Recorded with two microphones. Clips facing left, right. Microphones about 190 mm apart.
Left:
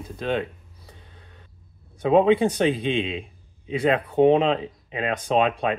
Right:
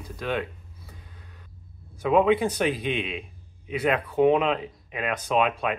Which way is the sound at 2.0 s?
30° left (ahead or behind).